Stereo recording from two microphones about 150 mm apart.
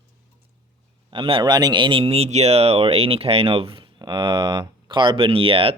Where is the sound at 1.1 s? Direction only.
35° right (ahead or behind).